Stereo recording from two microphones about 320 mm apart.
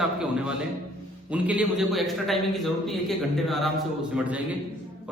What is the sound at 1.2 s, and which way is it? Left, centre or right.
A man's voice, centre.